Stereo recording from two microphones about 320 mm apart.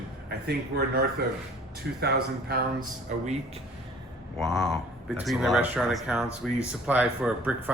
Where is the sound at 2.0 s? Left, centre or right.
Right.